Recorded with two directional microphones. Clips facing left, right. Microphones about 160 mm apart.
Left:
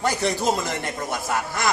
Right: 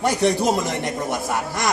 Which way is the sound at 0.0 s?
20° right (ahead or behind).